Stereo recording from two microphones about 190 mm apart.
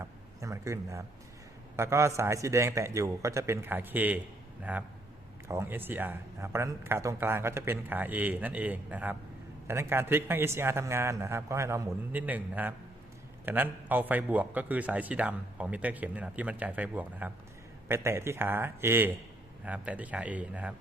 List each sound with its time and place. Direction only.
0.0 s a man's voice: 15° right (ahead or behind)